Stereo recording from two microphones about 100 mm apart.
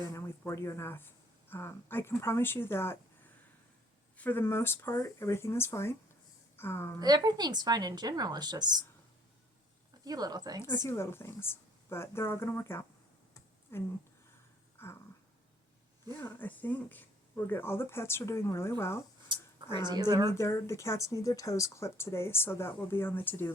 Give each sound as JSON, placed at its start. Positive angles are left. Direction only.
{"t": 0.1, "sound": "speech", "side_deg": 30}
{"t": 4.2, "sound": "speech", "side_deg": 20}
{"t": 7.0, "sound": "a woman's voice", "side_deg": -45}
{"t": 10.0, "sound": "speech", "side_deg": -40}
{"t": 10.8, "sound": "speech", "side_deg": 25}
{"t": 14.8, "sound": "a sound", "side_deg": 25}
{"t": 16.4, "sound": "speech", "side_deg": 15}
{"t": 19.3, "sound": "speech", "side_deg": -50}
{"t": 20.3, "sound": "speech", "side_deg": 30}